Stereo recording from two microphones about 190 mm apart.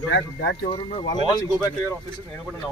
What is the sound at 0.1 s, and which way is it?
Speech, 65° left (ahead or behind).